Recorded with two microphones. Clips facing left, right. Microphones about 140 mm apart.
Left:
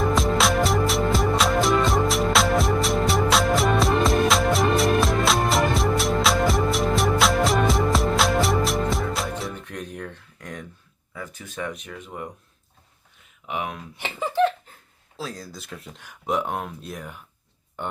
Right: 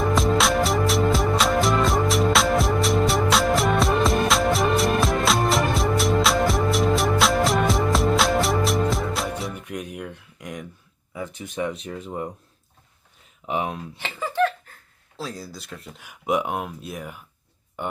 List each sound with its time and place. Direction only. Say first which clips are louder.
0.0 s music: right 1 dB; centre (ahead or behind)
9.6 s a sound: right 2 dB; 10° right (ahead or behind)
11.1 s speech: right 4 dB; 20° right (ahead or behind)
13.4 s speech: right 3 dB; 30° right (ahead or behind)
13.9 s a sound: left 6 dB; 20° left (ahead or behind)
15.2 s speech: right 1 dB; 5° right (ahead or behind)